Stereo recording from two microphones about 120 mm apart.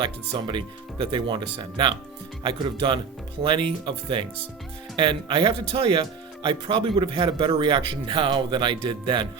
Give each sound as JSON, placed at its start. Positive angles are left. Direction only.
{"t": 0.0, "sound": "a man's voice", "side_deg": -40}